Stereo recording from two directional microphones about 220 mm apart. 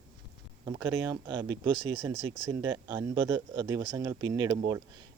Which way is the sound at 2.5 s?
15° right (ahead or behind).